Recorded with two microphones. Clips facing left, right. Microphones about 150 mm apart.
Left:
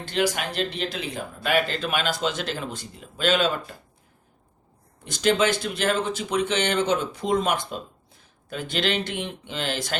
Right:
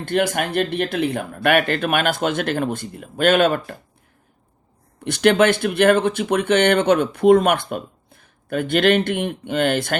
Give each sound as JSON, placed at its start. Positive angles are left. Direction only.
{"t": 0.0, "sound": "speech", "side_deg": -55}
{"t": 5.0, "sound": "speech", "side_deg": -65}